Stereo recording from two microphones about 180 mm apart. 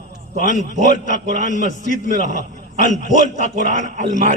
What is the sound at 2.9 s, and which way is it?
A man's voice, 45° right (ahead or behind).